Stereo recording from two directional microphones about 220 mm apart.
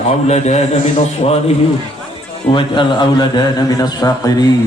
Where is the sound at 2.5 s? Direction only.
20° left (ahead or behind).